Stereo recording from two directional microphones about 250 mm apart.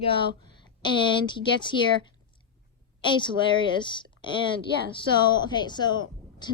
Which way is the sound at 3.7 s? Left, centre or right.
Centre.